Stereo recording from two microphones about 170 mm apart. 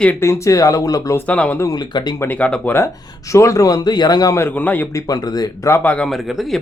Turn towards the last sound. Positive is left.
turn(degrees=0)  # may be behind; listen again after turning